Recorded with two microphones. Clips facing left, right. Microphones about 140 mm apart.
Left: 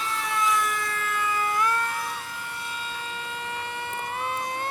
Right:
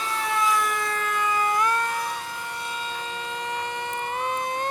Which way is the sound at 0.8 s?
20° right (ahead or behind).